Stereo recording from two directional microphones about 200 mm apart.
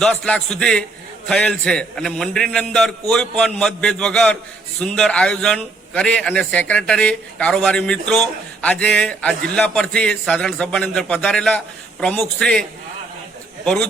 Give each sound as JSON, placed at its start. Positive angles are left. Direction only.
{"t": 0.0, "sound": "a man's voice", "side_deg": 5}